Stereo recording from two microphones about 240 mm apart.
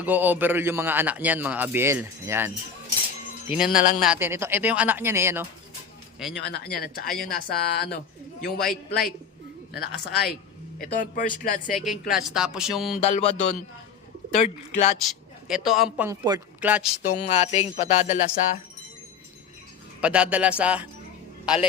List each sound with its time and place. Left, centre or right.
0.0 s a man's voice: centre
3.8 s speech: left
4.0 s a man's voice: centre
6.3 s speech: left
9.7 s speech: centre
10.8 s speech: left
12.1 s speech: centre
13.0 s speech: left
15.0 s speech: centre
16.0 s a man's voice: centre
17.0 s speech: left
20.0 s a man's voice: centre